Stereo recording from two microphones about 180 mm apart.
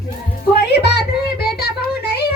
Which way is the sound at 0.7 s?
65° left (ahead or behind).